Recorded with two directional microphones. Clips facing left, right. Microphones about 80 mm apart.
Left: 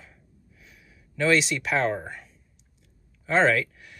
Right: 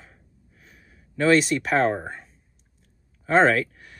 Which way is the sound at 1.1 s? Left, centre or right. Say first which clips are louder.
Right 4 dB; right.